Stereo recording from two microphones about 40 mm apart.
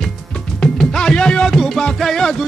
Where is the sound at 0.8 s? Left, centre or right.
Centre.